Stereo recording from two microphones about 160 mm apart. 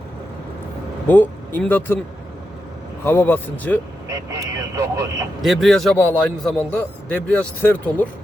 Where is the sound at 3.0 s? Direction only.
15° left (ahead or behind).